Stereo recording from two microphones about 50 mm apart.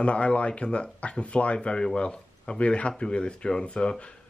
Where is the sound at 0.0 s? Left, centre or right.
Left.